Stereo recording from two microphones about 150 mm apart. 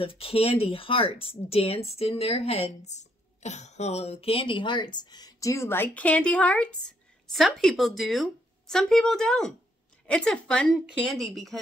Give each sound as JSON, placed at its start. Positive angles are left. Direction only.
{"t": 0.0, "sound": "a woman's voice", "side_deg": 40}